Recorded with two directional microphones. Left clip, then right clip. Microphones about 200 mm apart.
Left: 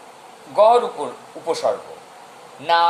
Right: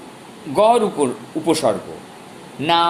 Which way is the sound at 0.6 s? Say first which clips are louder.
Even; 30° right (ahead or behind).